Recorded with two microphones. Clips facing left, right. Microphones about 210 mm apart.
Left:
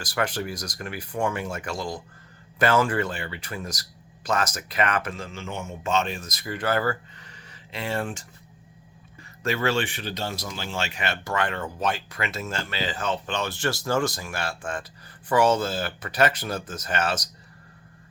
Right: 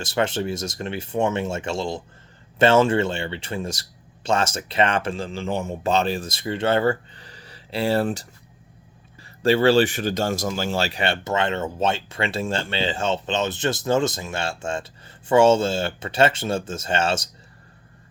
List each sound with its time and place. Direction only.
0.0 s speech: 25° right (ahead or behind)
9.4 s speech: 30° right (ahead or behind)